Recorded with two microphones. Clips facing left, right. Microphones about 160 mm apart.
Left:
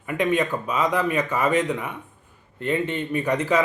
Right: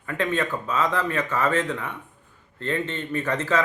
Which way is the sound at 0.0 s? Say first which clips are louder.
Left 3 dB; 15° left (ahead or behind).